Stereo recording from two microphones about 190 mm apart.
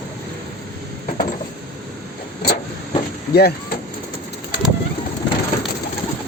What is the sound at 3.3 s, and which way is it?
Speech, 55° left (ahead or behind).